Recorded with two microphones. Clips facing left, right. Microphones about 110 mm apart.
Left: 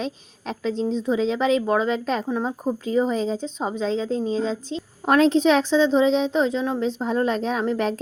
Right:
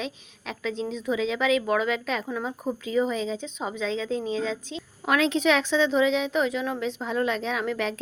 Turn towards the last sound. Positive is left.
turn(degrees=40)  # may be behind; listen again after turning